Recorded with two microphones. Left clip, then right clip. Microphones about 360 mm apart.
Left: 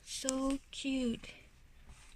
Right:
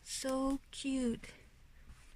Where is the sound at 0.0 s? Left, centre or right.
Centre.